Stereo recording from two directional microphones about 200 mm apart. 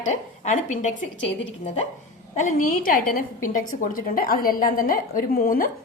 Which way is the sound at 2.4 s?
40° left (ahead or behind).